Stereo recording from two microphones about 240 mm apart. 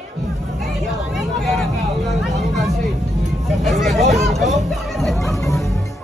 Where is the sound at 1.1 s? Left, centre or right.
Centre.